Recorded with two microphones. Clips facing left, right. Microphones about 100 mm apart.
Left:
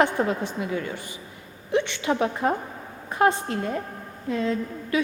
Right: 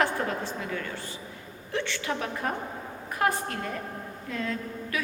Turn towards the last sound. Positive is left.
turn(degrees=20)  # may be behind; listen again after turning